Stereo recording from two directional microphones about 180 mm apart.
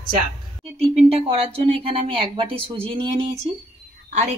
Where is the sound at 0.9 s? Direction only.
35° right (ahead or behind).